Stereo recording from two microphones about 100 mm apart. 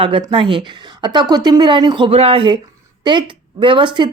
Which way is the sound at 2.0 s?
70° right (ahead or behind).